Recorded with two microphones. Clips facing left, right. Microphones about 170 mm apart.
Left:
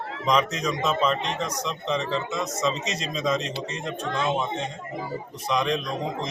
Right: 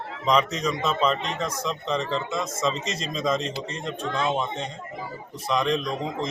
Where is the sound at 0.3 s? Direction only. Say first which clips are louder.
Right 1 dB; centre (ahead or behind).